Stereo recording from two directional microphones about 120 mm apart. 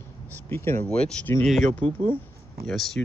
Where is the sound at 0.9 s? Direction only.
5° left (ahead or behind).